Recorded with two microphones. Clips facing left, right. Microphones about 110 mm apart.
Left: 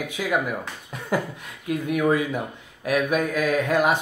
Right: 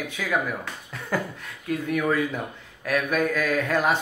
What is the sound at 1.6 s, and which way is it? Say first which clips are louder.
Speech: left 3 dB; 15° left (ahead or behind).